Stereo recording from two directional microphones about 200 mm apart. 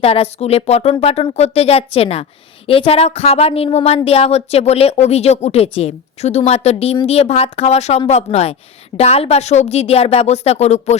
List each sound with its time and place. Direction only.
0.0 s a woman's voice: 30° left (ahead or behind)